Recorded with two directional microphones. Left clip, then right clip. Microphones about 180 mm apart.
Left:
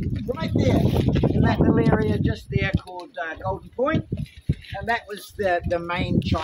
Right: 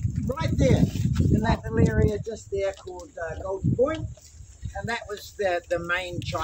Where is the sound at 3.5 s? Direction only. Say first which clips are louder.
Left 2 dB; 15° left (ahead or behind).